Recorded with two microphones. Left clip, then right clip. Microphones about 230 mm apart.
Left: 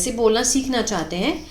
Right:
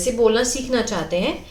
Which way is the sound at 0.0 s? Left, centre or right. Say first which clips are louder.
Right 1 dB; left.